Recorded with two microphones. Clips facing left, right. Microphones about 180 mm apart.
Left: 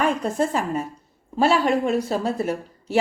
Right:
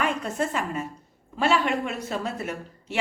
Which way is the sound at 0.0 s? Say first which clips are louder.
Left 5 dB; 35° left (ahead or behind).